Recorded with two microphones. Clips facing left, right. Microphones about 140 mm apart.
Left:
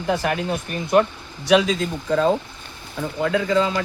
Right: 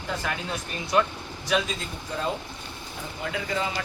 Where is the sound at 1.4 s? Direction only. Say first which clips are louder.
Left 10 dB; 85° left.